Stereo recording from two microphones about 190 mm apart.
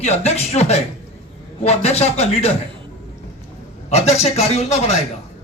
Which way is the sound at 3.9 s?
35° left (ahead or behind).